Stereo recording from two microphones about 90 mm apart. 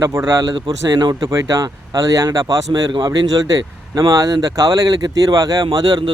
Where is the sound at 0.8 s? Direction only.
45° right (ahead or behind).